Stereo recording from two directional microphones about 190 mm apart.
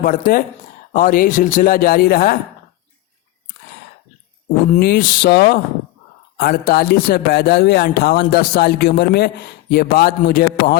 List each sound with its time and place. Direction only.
0.0 s speech: 50° left (ahead or behind)
4.8 s speech: 55° left (ahead or behind)